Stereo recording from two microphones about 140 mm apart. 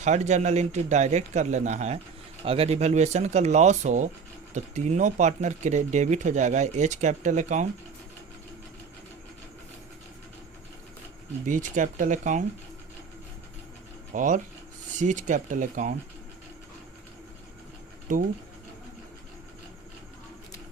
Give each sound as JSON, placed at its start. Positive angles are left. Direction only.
{"t": 0.0, "sound": "speech", "side_deg": -55}
{"t": 2.4, "sound": "speech", "side_deg": -45}
{"t": 11.4, "sound": "speech", "side_deg": -65}
{"t": 14.1, "sound": "speech", "side_deg": -65}
{"t": 18.1, "sound": "speech", "side_deg": -65}